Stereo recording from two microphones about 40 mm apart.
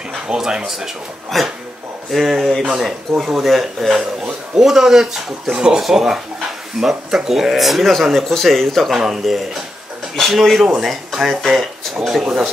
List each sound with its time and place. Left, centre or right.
0.3 s speech: centre
1.3 s speech: centre
8.9 s speech: centre
12.1 s speech: centre